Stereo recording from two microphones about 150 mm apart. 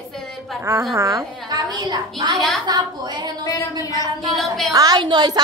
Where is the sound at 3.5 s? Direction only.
25° left (ahead or behind).